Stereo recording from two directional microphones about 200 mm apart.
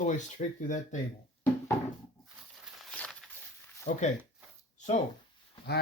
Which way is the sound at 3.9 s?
35° left (ahead or behind).